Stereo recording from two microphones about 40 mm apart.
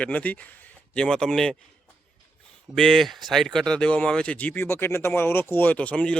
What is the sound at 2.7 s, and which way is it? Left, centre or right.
Speech, centre.